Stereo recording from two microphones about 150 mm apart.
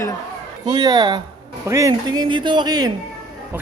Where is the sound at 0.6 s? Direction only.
25° right (ahead or behind).